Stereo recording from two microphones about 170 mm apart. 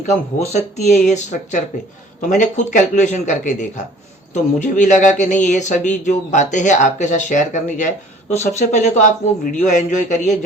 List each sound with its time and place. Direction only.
0.1 s a man's voice: 40° left (ahead or behind)